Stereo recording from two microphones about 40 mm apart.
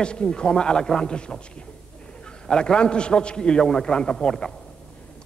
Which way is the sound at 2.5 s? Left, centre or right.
Left.